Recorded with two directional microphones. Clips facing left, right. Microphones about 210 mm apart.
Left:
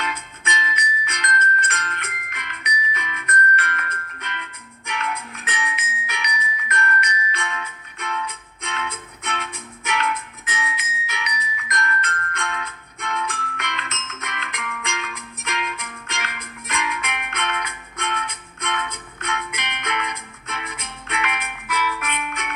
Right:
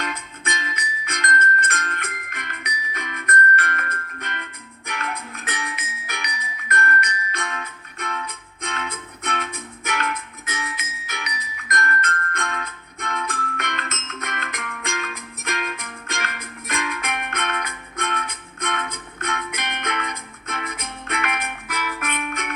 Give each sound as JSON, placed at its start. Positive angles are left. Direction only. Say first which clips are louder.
{"t": 0.5, "sound": "music", "louder": "left 6 dB", "side_deg": -50}
{"t": 4.9, "sound": "music", "louder": "left 2 dB", "side_deg": -40}
{"t": 6.1, "sound": "music", "louder": "left 4 dB", "side_deg": -50}